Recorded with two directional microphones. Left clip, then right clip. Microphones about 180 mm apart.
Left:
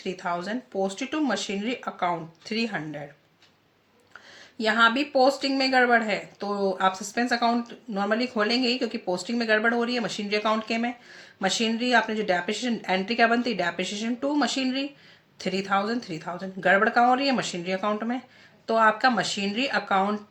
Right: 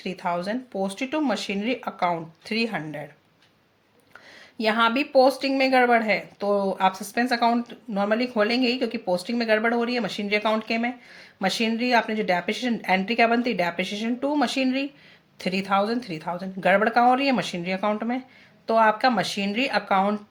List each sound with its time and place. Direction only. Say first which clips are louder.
0.0 s speech: right 2 dB; 35° right (ahead or behind)
4.5 s speech: even; 30° right (ahead or behind)